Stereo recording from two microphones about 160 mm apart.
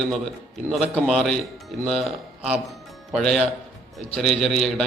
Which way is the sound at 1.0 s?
Centre (ahead or behind).